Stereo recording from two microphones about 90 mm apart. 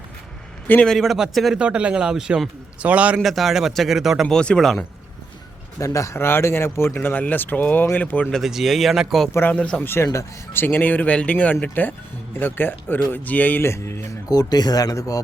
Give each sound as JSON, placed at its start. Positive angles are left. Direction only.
{"t": 0.9, "sound": "a man's voice", "side_deg": 0}
{"t": 1.5, "sound": "speech", "side_deg": -15}
{"t": 3.2, "sound": "a man's voice", "side_deg": 0}
{"t": 4.3, "sound": "speech", "side_deg": 10}
{"t": 5.8, "sound": "speech", "side_deg": 35}
{"t": 8.3, "sound": "a man's voice", "side_deg": -5}
{"t": 9.3, "sound": "speech", "side_deg": 20}
{"t": 9.9, "sound": "speech", "side_deg": 30}
{"t": 14.3, "sound": "speech", "side_deg": 45}